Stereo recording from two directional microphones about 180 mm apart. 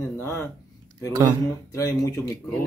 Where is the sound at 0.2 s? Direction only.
15° left (ahead or behind).